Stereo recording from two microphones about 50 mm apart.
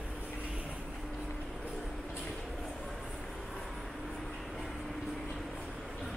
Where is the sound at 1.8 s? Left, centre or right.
Centre.